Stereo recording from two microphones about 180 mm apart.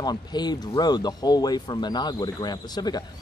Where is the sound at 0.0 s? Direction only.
25° left (ahead or behind).